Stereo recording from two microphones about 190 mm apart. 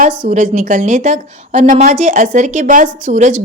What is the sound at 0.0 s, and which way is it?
A woman's voice, 40° right (ahead or behind).